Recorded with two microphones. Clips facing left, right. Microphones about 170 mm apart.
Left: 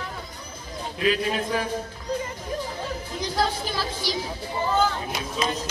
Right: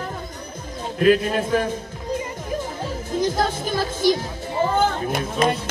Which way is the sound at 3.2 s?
50° right (ahead or behind).